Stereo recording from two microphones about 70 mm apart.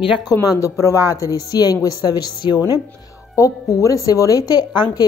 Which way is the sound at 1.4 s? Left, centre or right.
Left.